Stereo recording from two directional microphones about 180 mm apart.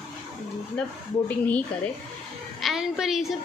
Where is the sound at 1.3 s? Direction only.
10° left (ahead or behind).